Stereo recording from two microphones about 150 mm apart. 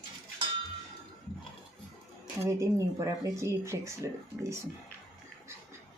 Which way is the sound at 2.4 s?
20° right (ahead or behind).